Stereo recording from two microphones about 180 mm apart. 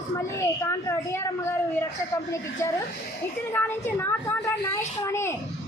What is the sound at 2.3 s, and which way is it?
A woman's voice, 15° left (ahead or behind).